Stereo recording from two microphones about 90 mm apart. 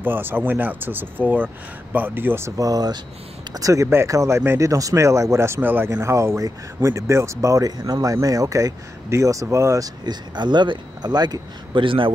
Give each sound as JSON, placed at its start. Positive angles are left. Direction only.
{"t": 0.0, "sound": "speech", "side_deg": -20}
{"t": 2.5, "sound": "speech", "side_deg": -40}
{"t": 5.9, "sound": "speech", "side_deg": -35}
{"t": 10.0, "sound": "speech", "side_deg": -55}